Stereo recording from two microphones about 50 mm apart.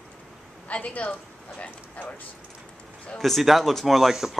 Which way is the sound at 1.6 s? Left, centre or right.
Left.